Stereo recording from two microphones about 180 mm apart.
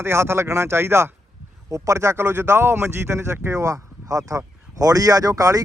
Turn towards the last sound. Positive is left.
turn(degrees=-20)  # may be behind; listen again after turning